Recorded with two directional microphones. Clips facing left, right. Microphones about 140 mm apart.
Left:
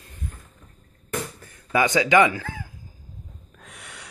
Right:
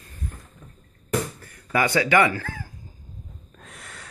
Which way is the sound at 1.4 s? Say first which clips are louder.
Left 1 dB; 20° left (ahead or behind).